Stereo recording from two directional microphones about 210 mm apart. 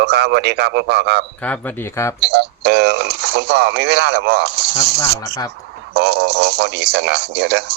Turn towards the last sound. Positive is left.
turn(degrees=-50)  # may be behind; listen again after turning